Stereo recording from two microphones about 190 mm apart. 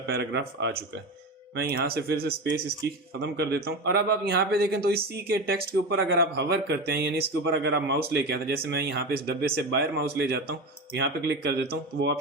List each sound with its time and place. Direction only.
0.1 s a man's voice: 65° right (ahead or behind)